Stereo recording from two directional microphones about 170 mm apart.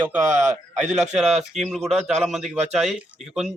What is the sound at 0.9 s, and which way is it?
Speech, 5° right (ahead or behind).